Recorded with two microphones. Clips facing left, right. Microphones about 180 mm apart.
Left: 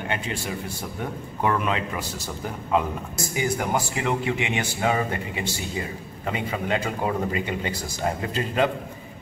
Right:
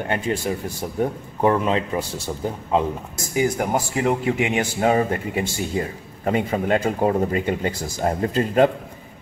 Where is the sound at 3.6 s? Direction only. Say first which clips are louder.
Right 4 dB; 40° right (ahead or behind).